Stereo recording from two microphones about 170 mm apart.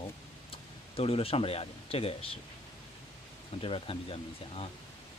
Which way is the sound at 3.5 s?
35° left (ahead or behind).